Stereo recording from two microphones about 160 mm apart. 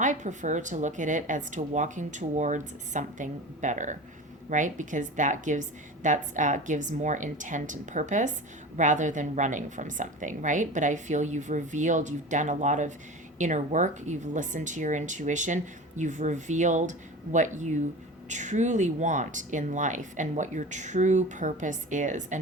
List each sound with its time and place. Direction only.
0.0 s a woman's voice: 50° right (ahead or behind)